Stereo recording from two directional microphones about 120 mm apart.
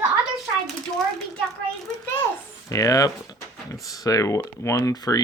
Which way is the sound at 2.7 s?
30° left (ahead or behind).